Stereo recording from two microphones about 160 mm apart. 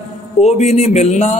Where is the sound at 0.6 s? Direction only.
45° left (ahead or behind).